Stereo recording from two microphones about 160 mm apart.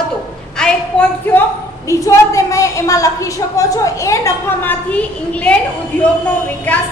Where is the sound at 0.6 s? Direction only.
5° left (ahead or behind).